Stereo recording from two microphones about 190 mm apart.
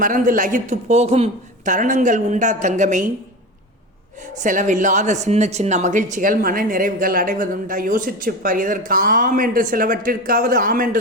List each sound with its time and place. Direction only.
0.0 s speech: 45° right (ahead or behind)
4.4 s a woman's voice: 40° right (ahead or behind)